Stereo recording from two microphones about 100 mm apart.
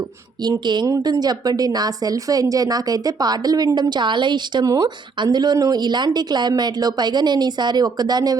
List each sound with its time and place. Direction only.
0.4 s speech: 50° right (ahead or behind)
0.9 s speech: 35° right (ahead or behind)